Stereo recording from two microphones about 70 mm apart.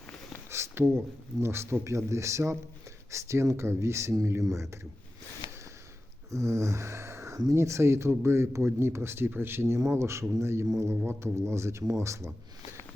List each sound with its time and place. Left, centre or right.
0.5 s speech: right
6.3 s speech: right